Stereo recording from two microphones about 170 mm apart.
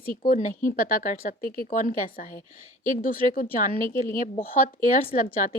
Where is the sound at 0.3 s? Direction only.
50° left (ahead or behind).